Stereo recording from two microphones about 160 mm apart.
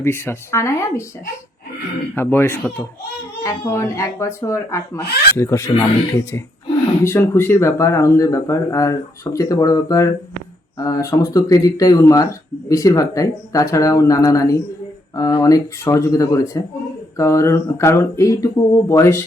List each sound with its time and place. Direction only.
0.0 s speech: 15° left (ahead or behind)
2.1 s speech: 15° left (ahead or behind)
7.0 s speech: 15° left (ahead or behind)